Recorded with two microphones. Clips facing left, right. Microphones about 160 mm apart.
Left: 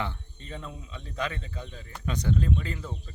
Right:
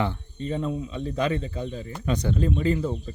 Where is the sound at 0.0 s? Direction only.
25° right (ahead or behind).